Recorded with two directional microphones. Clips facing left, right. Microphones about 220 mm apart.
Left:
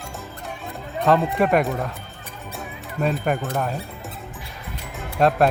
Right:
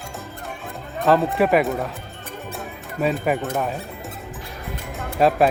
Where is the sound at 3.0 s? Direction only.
Centre (ahead or behind).